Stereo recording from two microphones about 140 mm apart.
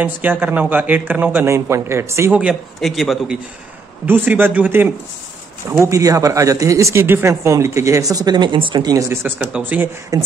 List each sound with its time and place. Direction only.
0.0 s speech: 10° right (ahead or behind)
2.4 s a man's voice: centre (ahead or behind)
4.0 s speech: 10° right (ahead or behind); by 9.0 s 30° right (ahead or behind)
9.1 s speech: 15° right (ahead or behind)
10.1 s speech: 25° right (ahead or behind)